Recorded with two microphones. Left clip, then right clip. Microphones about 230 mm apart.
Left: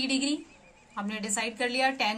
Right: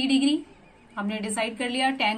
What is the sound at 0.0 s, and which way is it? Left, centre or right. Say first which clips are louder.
A woman's voice: right 6 dB; left.